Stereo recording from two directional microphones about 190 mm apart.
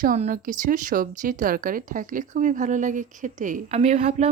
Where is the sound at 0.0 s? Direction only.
45° right (ahead or behind).